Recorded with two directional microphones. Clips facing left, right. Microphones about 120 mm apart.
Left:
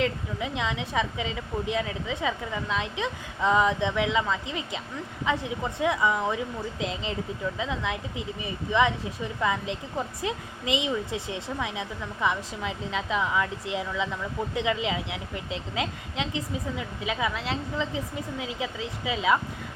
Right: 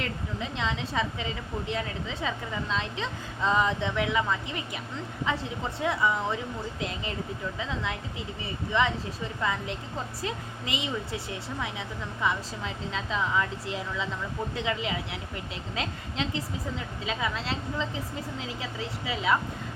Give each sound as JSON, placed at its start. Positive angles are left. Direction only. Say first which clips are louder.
{"t": 0.0, "sound": "speech", "louder": "left 5 dB", "side_deg": 15}